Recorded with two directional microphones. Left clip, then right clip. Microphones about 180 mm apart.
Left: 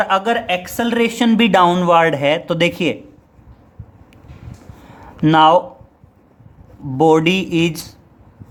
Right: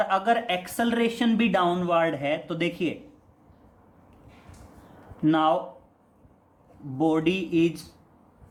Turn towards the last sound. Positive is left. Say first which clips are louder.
# left 6 dB
turn(degrees=55)  # may be behind; listen again after turning